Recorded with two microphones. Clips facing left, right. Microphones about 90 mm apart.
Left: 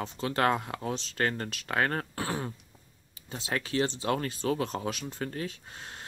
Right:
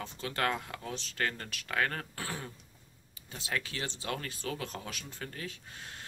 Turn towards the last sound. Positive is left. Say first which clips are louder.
# left 3 dB
turn(degrees=30)  # may be behind; listen again after turning